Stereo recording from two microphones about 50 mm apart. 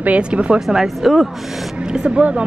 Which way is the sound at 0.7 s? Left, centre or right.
Centre.